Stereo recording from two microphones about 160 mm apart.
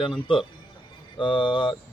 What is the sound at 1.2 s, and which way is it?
Speech, 30° left (ahead or behind).